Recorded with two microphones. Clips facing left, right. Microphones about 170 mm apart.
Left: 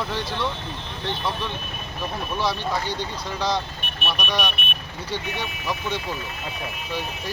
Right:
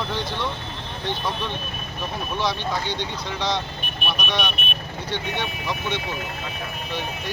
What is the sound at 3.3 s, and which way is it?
Speech, 10° left (ahead or behind).